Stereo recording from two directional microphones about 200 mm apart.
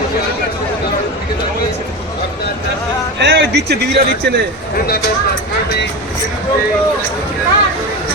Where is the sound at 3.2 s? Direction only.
60° right (ahead or behind).